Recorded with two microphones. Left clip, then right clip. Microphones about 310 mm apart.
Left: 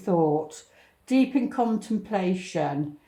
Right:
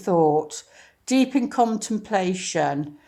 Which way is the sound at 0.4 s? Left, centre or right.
Right.